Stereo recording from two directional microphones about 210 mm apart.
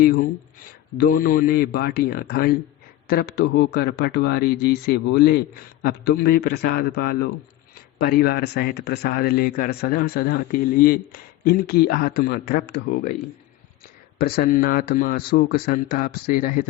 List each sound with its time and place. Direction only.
0.0 s speech: 45° left (ahead or behind)
14.2 s speech: 45° left (ahead or behind)